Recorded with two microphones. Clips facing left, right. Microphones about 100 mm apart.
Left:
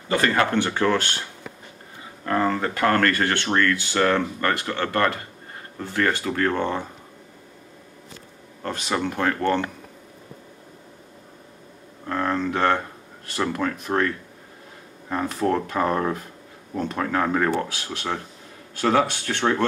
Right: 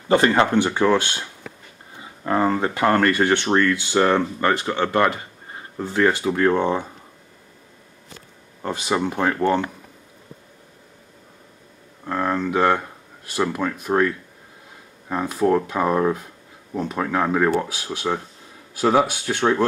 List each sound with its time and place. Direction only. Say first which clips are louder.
0.1 s speech: right 4 dB; 20° right (ahead or behind)
2.2 s speech: right 2 dB; 20° right (ahead or behind)
8.6 s speech: right 3 dB; 15° right (ahead or behind)
12.1 s speech: right 2 dB; 5° right (ahead or behind)